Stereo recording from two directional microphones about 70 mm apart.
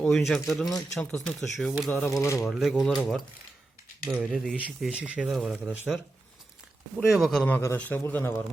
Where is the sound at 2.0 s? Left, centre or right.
Left.